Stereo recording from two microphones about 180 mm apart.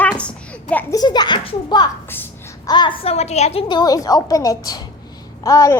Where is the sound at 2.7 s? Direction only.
25° left (ahead or behind).